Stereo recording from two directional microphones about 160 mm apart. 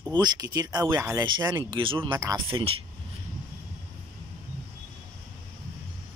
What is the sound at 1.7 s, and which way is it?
Speech, 35° right (ahead or behind).